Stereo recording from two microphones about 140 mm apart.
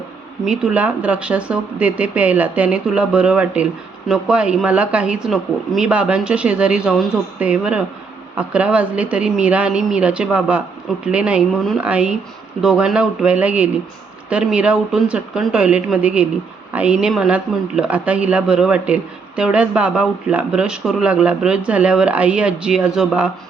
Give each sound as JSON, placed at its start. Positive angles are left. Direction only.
{"t": 0.4, "sound": "speech", "side_deg": -5}